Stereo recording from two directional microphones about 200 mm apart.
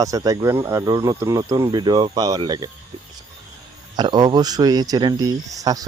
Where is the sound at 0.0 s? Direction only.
15° right (ahead or behind).